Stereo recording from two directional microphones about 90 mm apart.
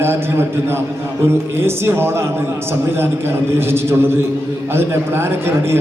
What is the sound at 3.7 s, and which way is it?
A man's voice, 25° right (ahead or behind).